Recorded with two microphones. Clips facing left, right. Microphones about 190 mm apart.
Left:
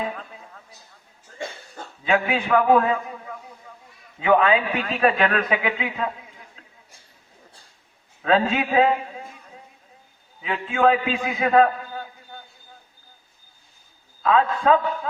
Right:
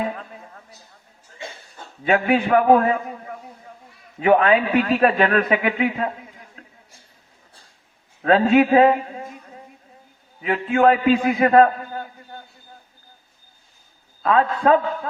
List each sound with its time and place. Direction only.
2.0 s a man's voice: 50° right (ahead or behind)
4.4 s a man's voice: 45° right (ahead or behind)
8.2 s a man's voice: 50° right (ahead or behind)
10.4 s a man's voice: 50° right (ahead or behind)
14.2 s a man's voice: 50° right (ahead or behind)